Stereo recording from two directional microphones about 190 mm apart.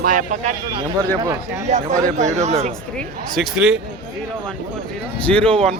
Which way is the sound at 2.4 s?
35° right (ahead or behind).